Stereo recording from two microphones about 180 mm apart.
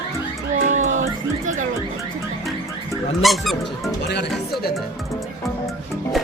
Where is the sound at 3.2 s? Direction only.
Centre (ahead or behind).